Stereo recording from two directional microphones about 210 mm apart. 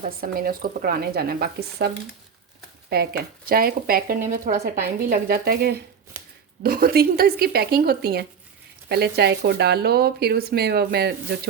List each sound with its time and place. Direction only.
0.2 s speech: 45° right (ahead or behind)
2.9 s speech: 50° right (ahead or behind)